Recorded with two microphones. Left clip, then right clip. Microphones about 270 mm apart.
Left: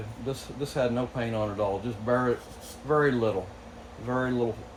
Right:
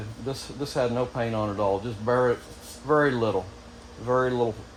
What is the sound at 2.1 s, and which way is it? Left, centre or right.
Speech, right.